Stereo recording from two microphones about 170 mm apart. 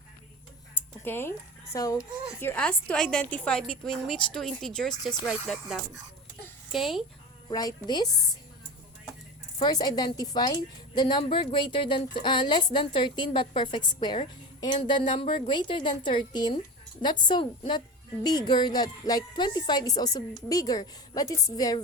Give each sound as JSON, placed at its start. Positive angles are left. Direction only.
{"t": 0.7, "sound": "tick-tock", "side_deg": 15}
{"t": 1.7, "sound": "speech", "side_deg": 20}
{"t": 7.5, "sound": "speech", "side_deg": 25}
{"t": 9.6, "sound": "speech", "side_deg": 25}